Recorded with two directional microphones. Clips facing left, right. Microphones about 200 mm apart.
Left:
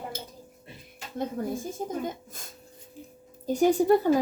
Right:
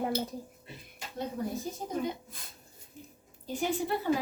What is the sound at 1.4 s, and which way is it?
A woman's voice, 50° left (ahead or behind).